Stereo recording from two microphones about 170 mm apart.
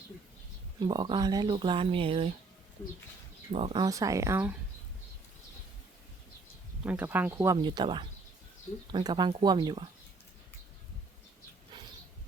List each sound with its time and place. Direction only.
0.8 s speech: 25° right (ahead or behind)
3.5 s speech: 35° right (ahead or behind)
3.8 s speech: 20° right (ahead or behind)
6.8 s speech: 10° right (ahead or behind)